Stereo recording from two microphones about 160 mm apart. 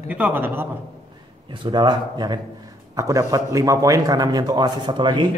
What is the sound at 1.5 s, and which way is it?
A man's voice, 30° right (ahead or behind).